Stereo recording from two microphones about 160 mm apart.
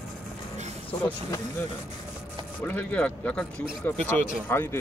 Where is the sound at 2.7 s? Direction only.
10° left (ahead or behind).